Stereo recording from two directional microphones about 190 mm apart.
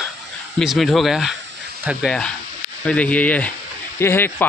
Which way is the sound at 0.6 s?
Centre (ahead or behind).